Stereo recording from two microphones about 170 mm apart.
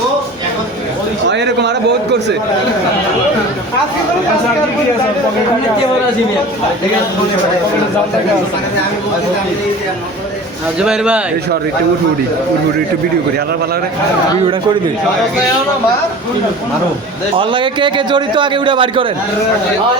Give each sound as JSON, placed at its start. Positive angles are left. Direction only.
{"t": 1.3, "sound": "a man's voice", "side_deg": -90}
{"t": 10.8, "sound": "speech", "side_deg": -5}
{"t": 17.3, "sound": "a man's voice", "side_deg": -30}